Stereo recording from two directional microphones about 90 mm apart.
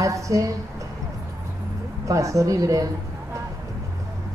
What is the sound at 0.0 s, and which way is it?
Speech, 35° right (ahead or behind).